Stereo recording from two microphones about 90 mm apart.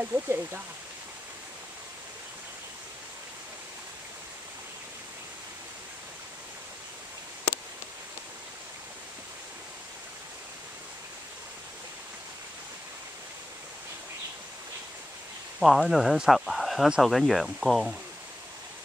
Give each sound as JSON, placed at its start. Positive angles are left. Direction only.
{"t": 0.0, "sound": "speech", "side_deg": -25}
{"t": 15.6, "sound": "speech", "side_deg": 0}